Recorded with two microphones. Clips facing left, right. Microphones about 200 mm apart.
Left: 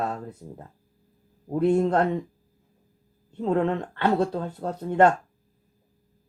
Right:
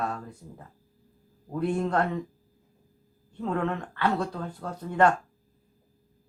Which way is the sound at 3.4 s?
25° left (ahead or behind).